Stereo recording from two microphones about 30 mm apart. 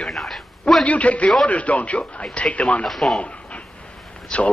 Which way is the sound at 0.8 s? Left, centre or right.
Left.